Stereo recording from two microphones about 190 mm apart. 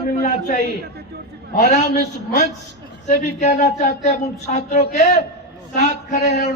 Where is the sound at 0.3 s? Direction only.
40° left (ahead or behind).